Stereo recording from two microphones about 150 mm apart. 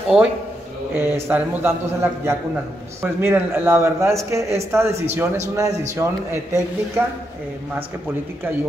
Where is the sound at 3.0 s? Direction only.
15° right (ahead or behind).